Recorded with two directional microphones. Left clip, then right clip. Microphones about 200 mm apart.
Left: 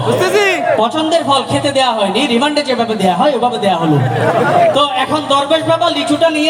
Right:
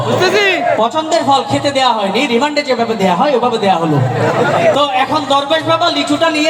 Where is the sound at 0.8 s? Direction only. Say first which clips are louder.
Even; 35° right (ahead or behind).